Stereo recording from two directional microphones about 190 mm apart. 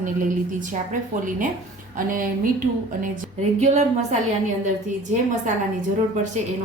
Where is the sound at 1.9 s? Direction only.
45° right (ahead or behind).